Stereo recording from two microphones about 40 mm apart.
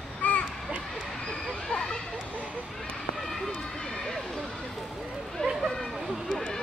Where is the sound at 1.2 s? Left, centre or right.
Centre.